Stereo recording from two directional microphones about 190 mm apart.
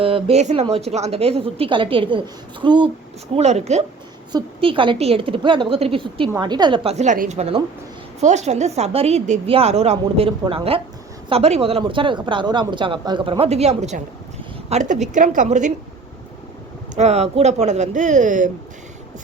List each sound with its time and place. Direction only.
0.0 s speech: 30° right (ahead or behind)
3.3 s a woman's voice: 35° right (ahead or behind)
4.3 s a woman's voice: 25° right (ahead or behind); by 15.7 s 40° right (ahead or behind)
16.9 s a woman's voice: 35° right (ahead or behind)